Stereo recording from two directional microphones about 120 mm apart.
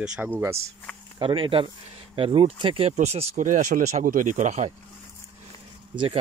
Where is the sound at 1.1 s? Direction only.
45° right (ahead or behind).